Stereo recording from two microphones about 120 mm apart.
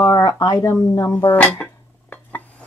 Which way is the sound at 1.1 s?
10° left (ahead or behind).